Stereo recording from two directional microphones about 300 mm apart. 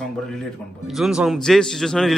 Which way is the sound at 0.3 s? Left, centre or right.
Centre.